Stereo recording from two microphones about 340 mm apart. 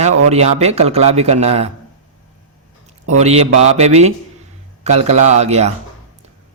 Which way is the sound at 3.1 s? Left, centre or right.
Centre.